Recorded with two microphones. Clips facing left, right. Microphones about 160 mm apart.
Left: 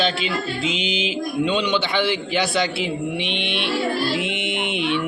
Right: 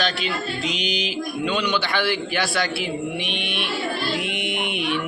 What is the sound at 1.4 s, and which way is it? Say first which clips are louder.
A man's voice: left 3 dB; 20° left (ahead or behind).